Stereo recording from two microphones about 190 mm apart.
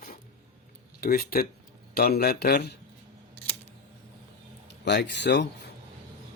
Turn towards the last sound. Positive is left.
turn(degrees=65)  # may be behind; listen again after turning